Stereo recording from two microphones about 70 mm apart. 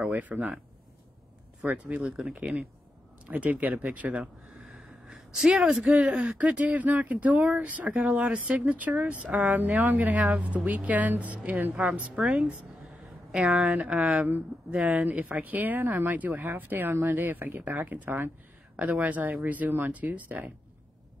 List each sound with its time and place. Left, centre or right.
0.1 s speech: right
1.7 s speech: right
3.3 s speech: right
11.7 s a woman's voice: centre